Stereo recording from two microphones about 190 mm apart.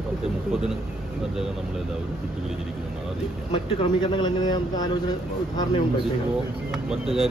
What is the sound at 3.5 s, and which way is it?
Speech, 25° left (ahead or behind).